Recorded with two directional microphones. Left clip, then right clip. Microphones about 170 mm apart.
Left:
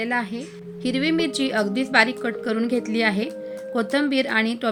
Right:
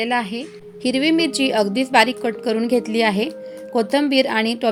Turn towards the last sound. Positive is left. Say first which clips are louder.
# right 4 dB
turn(degrees=-25)  # may be behind; listen again after turning